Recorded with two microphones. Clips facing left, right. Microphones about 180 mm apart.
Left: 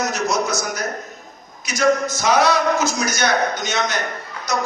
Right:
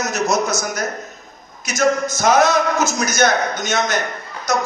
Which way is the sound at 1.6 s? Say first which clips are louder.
Even; 45° right (ahead or behind).